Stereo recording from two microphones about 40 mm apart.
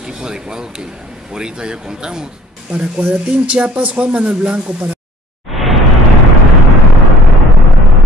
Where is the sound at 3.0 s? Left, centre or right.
Right.